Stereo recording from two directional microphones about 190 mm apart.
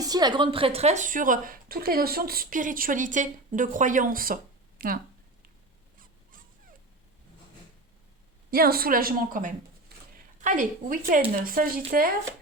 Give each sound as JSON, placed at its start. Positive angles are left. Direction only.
{"t": 0.0, "sound": "a woman's voice", "side_deg": -20}
{"t": 8.4, "sound": "a woman's voice", "side_deg": -50}